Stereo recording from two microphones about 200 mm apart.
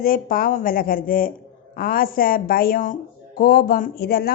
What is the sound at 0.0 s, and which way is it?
A woman's voice, 45° left (ahead or behind).